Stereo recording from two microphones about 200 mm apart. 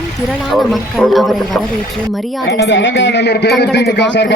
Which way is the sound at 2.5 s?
60° left (ahead or behind).